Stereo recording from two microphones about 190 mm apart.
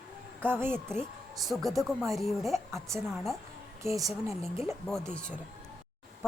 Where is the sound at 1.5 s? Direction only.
Centre (ahead or behind).